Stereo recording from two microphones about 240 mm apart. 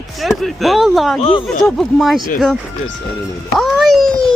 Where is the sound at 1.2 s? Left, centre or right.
Left.